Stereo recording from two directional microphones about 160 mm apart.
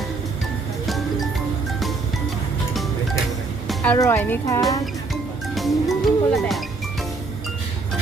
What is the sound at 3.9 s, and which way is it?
Speech, 15° left (ahead or behind).